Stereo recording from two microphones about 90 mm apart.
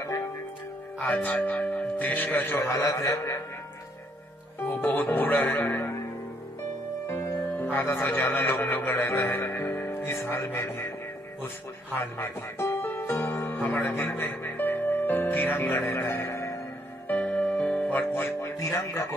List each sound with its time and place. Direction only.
0.9 s a man's voice: 15° left (ahead or behind); by 3.3 s 35° left (ahead or behind)
4.6 s speech: 20° left (ahead or behind)
7.1 s music: 30° left (ahead or behind)
7.5 s speech: 20° left (ahead or behind)
16.1 s music: 25° left (ahead or behind)
17.1 s music: 15° left (ahead or behind); by 19.1 s 35° left (ahead or behind)